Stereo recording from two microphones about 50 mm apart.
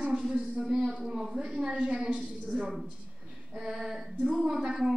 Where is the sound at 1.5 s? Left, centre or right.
Right.